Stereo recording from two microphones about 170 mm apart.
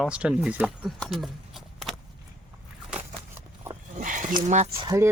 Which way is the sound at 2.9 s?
15° right (ahead or behind).